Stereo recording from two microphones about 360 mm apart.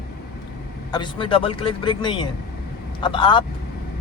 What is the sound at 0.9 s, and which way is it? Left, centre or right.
Speech, centre.